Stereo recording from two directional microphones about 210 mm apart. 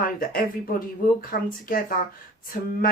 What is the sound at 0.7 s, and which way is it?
Speech, 40° left (ahead or behind).